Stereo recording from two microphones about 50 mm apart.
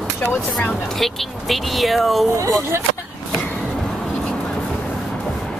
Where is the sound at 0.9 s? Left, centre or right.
Centre.